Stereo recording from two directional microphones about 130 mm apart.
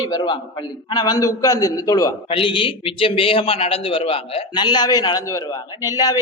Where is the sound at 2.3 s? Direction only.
40° left (ahead or behind).